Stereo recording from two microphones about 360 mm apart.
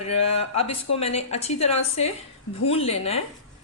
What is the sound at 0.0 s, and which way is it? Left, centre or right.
A woman's voice, centre.